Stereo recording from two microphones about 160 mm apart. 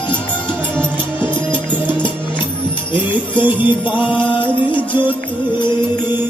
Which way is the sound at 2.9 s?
30° left (ahead or behind).